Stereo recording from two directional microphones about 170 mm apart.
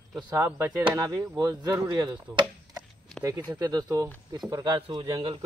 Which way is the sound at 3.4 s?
20° right (ahead or behind).